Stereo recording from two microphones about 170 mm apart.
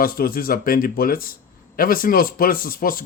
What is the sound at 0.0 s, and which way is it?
Speech, 60° left (ahead or behind).